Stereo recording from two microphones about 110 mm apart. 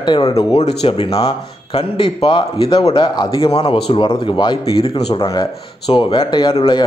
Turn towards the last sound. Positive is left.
turn(degrees=50)  # may be behind; listen again after turning